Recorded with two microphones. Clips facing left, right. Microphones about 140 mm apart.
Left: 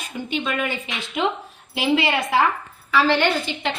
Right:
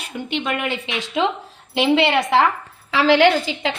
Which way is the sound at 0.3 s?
65° right (ahead or behind).